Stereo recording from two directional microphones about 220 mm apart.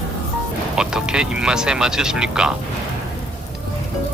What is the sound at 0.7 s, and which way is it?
Speech, 5° right (ahead or behind).